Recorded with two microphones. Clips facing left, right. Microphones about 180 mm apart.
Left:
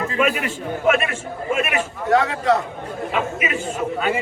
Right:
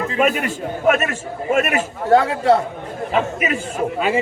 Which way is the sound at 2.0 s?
30° right (ahead or behind).